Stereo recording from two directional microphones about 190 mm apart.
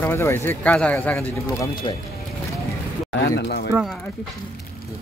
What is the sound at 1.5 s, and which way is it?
Speech, 20° left (ahead or behind).